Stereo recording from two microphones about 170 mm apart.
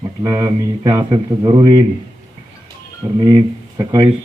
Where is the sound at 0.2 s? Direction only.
20° right (ahead or behind).